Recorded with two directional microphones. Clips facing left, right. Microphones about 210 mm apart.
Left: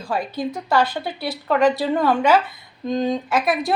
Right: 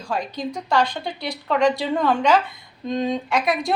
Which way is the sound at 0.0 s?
5° left (ahead or behind).